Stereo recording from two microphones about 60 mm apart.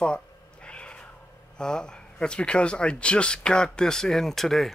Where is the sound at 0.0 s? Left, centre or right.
Centre.